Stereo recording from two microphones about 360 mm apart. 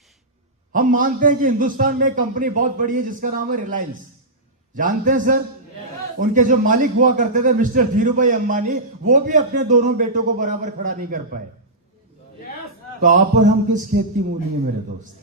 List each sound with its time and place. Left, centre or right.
0.7 s a man's voice: right
13.0 s a man's voice: right